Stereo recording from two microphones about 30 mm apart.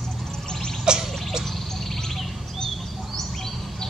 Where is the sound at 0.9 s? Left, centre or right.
Right.